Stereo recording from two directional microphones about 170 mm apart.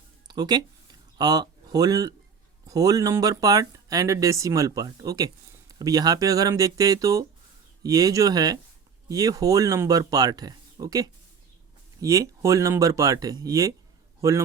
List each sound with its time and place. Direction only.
0.3 s a man's voice: 25° right (ahead or behind)